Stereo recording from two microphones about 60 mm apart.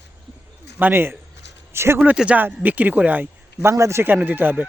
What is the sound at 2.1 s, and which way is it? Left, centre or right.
Speech, centre.